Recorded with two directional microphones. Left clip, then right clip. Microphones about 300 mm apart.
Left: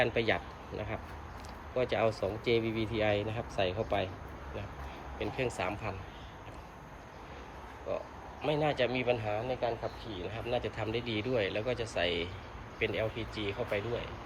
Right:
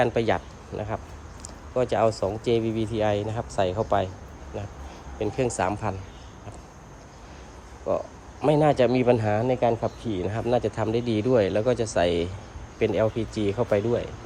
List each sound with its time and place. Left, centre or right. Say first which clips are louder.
0.0 s speech: right 7 dB; centre
5.2 s speech: right 9 dB; centre
8.4 s speech: right 11 dB; centre
9.0 s speech: right 10 dB; right
10.4 s speech: right 10 dB; centre